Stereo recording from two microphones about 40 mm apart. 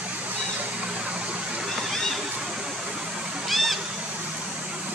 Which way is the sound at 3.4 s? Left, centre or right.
Centre.